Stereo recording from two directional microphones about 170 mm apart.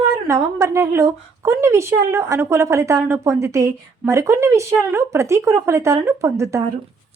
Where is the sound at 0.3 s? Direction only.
15° right (ahead or behind).